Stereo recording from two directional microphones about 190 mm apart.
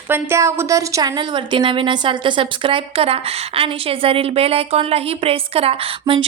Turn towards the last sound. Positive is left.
turn(degrees=-30)  # may be behind; listen again after turning